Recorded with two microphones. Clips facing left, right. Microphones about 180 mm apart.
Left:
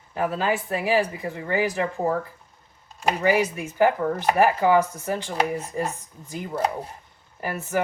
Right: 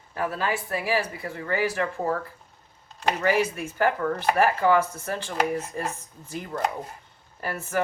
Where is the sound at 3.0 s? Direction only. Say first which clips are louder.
Left 2 dB; 10° left (ahead or behind).